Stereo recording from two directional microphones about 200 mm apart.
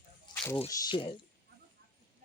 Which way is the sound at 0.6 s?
20° left (ahead or behind).